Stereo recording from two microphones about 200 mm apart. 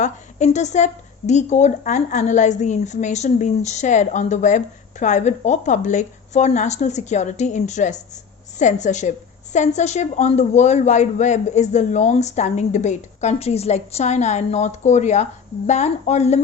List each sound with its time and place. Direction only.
0.0 s a woman's voice: 35° left (ahead or behind)